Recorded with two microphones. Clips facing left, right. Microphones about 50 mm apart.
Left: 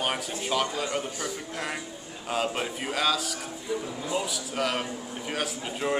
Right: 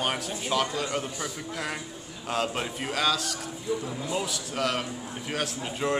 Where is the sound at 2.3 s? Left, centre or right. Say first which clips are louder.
Even; centre.